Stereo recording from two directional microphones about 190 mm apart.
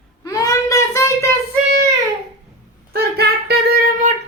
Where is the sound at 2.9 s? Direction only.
55° right (ahead or behind).